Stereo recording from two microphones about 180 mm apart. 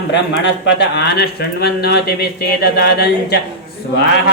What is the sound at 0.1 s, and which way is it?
Music, 80° left.